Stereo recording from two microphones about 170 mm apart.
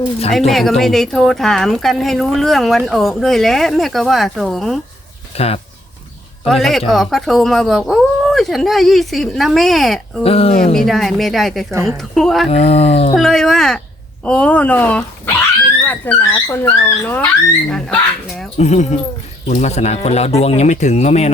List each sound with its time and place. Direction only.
0.3 s a woman's voice: centre (ahead or behind)
5.3 s speech: 35° left (ahead or behind)
6.5 s a woman's voice: centre (ahead or behind)
10.2 s speech: 35° left (ahead or behind)
10.8 s a woman's voice: centre (ahead or behind)
12.5 s speech: 35° left (ahead or behind)
13.1 s a woman's voice: centre (ahead or behind)
18.5 s speech: 40° left (ahead or behind)